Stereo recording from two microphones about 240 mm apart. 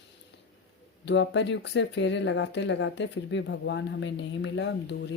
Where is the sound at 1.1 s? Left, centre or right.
Left.